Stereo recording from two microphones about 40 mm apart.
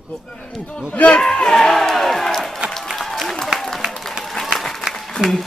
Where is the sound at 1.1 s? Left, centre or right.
Centre.